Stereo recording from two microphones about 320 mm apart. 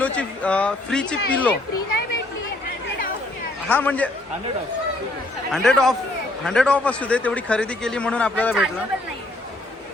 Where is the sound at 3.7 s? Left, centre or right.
Centre.